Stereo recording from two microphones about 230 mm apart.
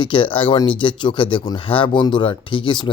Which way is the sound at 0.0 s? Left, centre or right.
Left.